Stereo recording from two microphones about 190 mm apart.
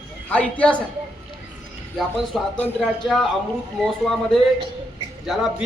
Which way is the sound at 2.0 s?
Centre (ahead or behind).